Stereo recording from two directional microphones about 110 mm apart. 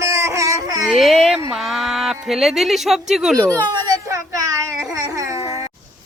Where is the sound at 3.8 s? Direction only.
30° right (ahead or behind).